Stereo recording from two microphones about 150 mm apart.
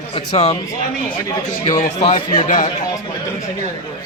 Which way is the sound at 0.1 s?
45° left (ahead or behind).